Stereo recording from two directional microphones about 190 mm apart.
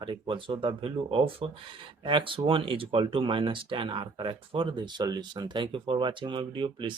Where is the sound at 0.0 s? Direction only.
25° right (ahead or behind).